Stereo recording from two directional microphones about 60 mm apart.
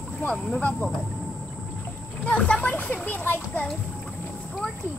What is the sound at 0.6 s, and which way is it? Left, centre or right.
Speech, left.